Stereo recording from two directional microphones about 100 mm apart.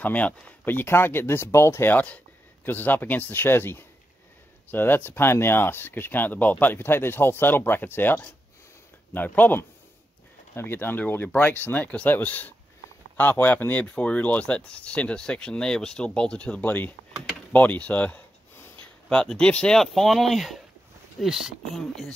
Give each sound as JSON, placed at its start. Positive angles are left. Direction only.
{"t": 0.0, "sound": "speech", "side_deg": 15}
{"t": 17.5, "sound": "a sound", "side_deg": 15}
{"t": 19.1, "sound": "speech", "side_deg": 10}